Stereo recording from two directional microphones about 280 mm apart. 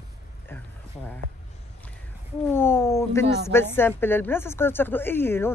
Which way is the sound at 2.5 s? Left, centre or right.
Centre.